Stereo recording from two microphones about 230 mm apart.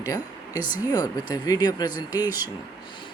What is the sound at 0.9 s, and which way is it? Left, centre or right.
Speech, centre.